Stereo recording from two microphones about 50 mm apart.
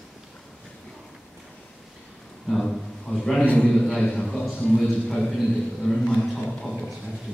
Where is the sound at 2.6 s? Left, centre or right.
Centre.